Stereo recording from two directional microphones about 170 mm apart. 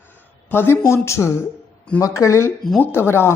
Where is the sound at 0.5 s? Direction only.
15° left (ahead or behind).